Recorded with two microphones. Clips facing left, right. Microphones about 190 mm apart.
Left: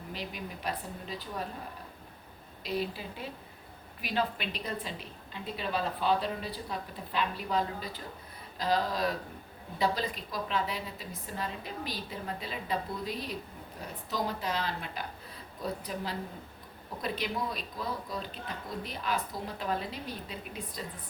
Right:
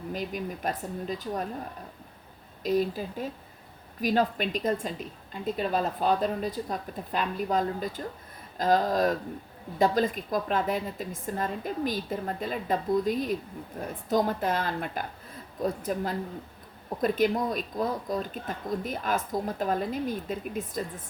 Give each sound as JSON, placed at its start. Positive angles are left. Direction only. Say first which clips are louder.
{"t": 0.1, "sound": "speech", "louder": "right 7 dB", "side_deg": -45}
{"t": 2.6, "sound": "speech", "louder": "right 8 dB", "side_deg": -45}